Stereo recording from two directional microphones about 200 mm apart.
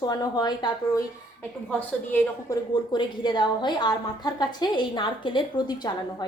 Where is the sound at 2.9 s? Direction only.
20° left (ahead or behind).